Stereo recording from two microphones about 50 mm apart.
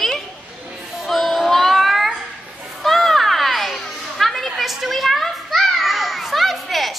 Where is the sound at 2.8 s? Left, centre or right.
Centre.